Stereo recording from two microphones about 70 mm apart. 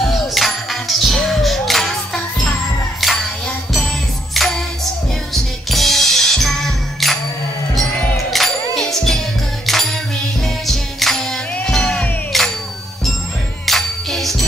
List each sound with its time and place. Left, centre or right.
0.0 s music: centre
8.3 s music: centre
10.4 s music: centre
12.3 s a sound: centre
13.7 s music: centre